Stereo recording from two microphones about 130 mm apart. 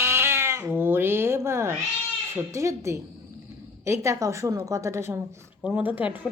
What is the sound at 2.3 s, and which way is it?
A woman's voice, 25° right (ahead or behind).